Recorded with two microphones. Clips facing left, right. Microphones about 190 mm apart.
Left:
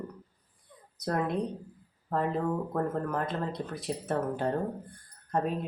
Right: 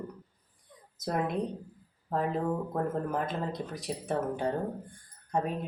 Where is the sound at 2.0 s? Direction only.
5° right (ahead or behind).